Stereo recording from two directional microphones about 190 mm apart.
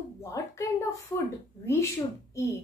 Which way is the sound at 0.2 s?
15° left (ahead or behind).